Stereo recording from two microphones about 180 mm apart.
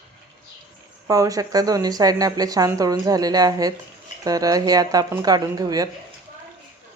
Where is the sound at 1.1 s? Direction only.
20° right (ahead or behind).